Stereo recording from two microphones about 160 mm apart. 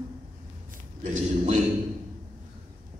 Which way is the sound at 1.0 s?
50° right (ahead or behind).